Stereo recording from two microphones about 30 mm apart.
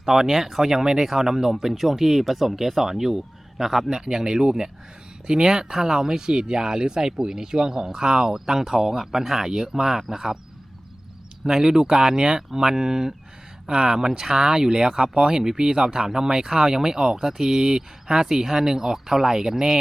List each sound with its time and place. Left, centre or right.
0.0 s speech: centre
3.8 s speech: right
11.4 s speech: right